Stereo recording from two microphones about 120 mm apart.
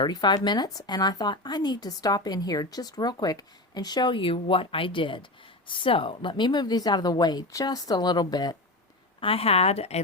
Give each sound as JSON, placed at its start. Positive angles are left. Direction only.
{"t": 0.0, "sound": "speech", "side_deg": 40}
{"t": 9.2, "sound": "a woman's voice", "side_deg": 50}